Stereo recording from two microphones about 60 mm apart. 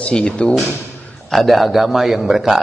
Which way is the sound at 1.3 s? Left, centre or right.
Centre.